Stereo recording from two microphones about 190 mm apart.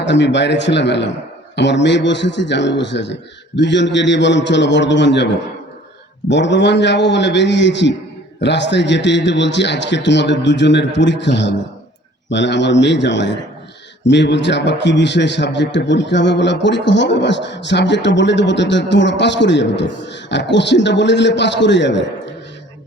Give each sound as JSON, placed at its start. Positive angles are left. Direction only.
{"t": 0.0, "sound": "a man's voice", "side_deg": 70}